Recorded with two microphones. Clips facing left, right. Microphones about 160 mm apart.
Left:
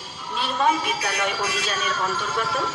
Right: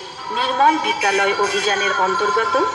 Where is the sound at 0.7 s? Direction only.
60° right (ahead or behind).